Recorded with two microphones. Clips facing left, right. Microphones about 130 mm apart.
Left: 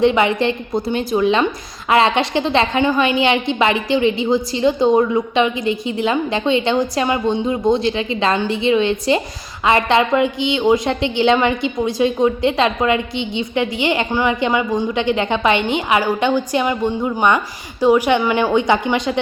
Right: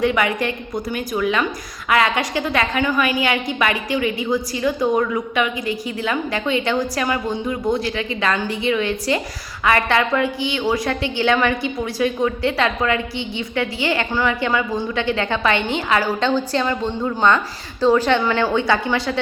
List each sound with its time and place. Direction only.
0.0 s a woman's voice: 25° left (ahead or behind)